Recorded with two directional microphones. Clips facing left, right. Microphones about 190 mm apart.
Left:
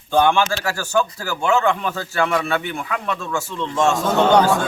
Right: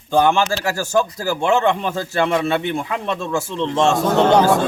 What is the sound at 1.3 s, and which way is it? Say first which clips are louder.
Speech: right 2 dB; 30° right (ahead or behind).